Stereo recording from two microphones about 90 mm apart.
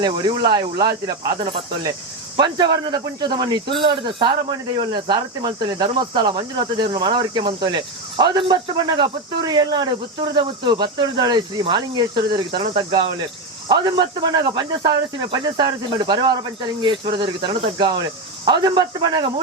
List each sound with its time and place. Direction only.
0.0 s speech: 55° right (ahead or behind)
2.4 s speech: 55° right (ahead or behind)
16.8 s speech: 65° right (ahead or behind)